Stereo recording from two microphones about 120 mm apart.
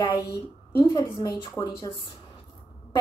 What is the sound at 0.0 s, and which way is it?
A woman's voice, 35° left (ahead or behind).